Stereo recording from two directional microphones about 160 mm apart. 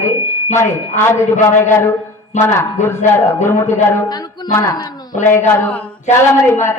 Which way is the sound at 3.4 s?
15° left (ahead or behind).